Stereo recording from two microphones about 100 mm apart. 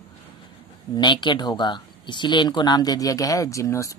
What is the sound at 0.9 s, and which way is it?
Speech, 50° left (ahead or behind).